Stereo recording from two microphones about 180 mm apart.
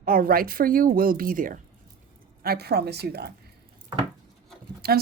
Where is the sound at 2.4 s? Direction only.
60° right (ahead or behind).